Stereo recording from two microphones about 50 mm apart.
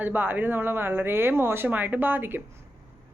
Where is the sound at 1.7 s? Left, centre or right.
Right.